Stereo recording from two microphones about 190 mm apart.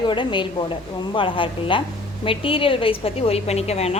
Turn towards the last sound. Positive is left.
turn(degrees=35)  # may be behind; listen again after turning